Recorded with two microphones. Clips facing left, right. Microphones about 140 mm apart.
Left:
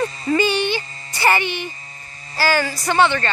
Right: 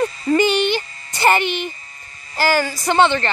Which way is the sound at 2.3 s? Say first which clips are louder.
Right 1 dB; 15° right (ahead or behind).